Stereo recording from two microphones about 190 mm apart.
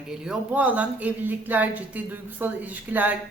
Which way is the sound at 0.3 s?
5° right (ahead or behind).